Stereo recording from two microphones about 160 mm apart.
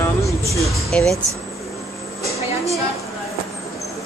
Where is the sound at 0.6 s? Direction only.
Centre (ahead or behind).